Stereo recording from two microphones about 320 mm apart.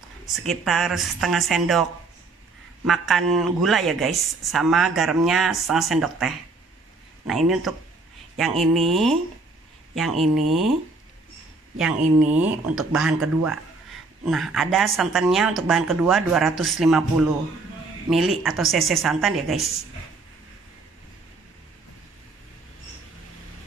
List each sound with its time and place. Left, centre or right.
0.3 s speech: centre
12.0 s speech: right
12.6 s speech: centre